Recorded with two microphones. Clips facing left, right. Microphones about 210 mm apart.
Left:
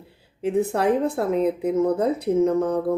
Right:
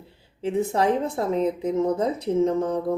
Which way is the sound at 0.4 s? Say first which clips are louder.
Left 2 dB; 60° left (ahead or behind).